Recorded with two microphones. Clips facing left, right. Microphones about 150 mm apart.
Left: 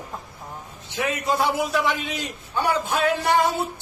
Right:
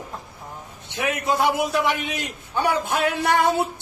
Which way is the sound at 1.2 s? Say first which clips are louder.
Right 2 dB; 15° right (ahead or behind).